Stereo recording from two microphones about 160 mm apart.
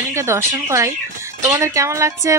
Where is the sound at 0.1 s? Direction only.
15° right (ahead or behind).